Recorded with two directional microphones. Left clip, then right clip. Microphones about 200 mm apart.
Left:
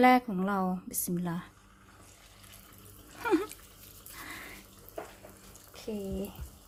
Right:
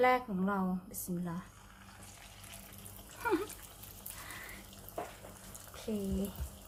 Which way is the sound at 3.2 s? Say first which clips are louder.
Left 5 dB; 35° left (ahead or behind).